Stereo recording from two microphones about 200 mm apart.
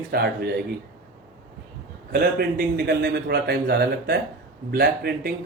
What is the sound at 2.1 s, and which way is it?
A man's voice, 50° right (ahead or behind).